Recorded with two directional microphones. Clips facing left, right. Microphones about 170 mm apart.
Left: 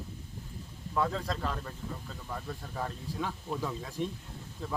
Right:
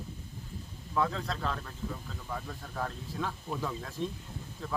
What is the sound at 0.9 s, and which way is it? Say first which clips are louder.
Speech: even; 5° left (ahead or behind).